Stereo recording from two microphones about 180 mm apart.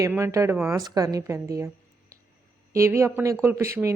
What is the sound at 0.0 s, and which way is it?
A woman's voice, 15° right (ahead or behind).